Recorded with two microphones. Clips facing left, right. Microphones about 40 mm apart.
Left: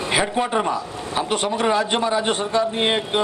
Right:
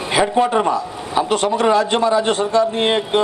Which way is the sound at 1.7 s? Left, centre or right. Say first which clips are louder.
Right 5 dB; centre.